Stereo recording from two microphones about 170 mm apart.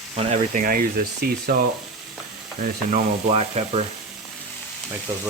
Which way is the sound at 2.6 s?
45° right (ahead or behind).